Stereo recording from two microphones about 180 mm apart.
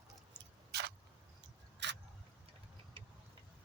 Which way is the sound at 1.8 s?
75° right (ahead or behind).